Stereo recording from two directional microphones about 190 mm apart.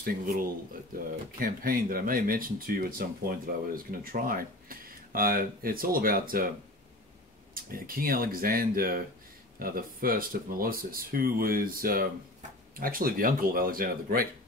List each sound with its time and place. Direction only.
0.0 s speech: 50° right (ahead or behind)
7.5 s speech: 50° right (ahead or behind)